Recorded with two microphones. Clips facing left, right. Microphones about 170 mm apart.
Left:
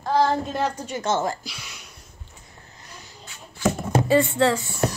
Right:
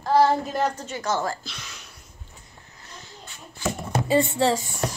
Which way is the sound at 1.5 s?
10° left (ahead or behind).